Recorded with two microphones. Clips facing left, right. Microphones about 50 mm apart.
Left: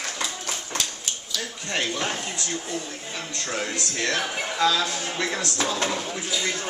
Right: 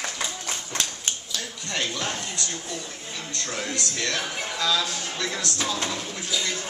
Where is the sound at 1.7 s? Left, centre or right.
Centre.